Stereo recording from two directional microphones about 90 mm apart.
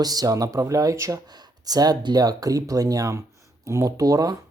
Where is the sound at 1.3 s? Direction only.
50° right (ahead or behind).